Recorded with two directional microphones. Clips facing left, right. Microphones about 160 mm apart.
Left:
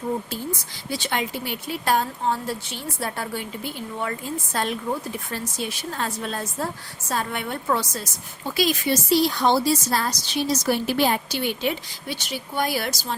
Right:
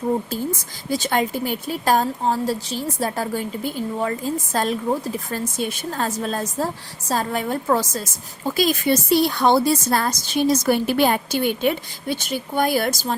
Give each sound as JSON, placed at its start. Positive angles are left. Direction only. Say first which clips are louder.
{"t": 0.3, "sound": "a woman's voice", "louder": "right 5 dB", "side_deg": -45}